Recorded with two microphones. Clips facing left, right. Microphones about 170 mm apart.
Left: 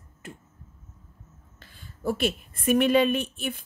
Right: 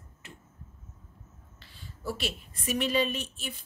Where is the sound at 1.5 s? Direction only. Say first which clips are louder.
Even; 50° left (ahead or behind).